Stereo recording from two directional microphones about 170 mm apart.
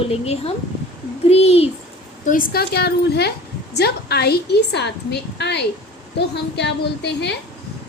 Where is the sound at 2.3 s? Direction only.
60° left (ahead or behind); by 7.3 s 90° left.